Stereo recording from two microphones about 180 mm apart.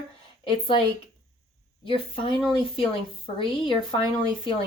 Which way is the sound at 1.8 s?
30° left (ahead or behind).